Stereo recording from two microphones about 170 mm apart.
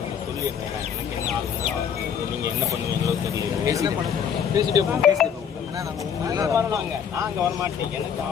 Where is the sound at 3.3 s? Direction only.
20° right (ahead or behind).